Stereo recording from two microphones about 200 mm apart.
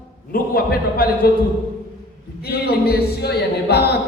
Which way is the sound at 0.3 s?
50° left (ahead or behind).